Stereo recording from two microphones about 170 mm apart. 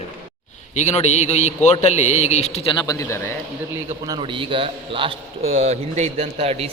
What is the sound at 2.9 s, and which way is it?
Speech, 15° left (ahead or behind).